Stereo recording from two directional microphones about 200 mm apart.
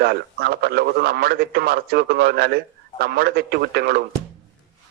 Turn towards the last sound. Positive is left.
turn(degrees=-50)  # may be behind; listen again after turning